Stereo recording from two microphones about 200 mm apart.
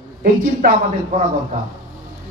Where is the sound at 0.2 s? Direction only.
40° right (ahead or behind).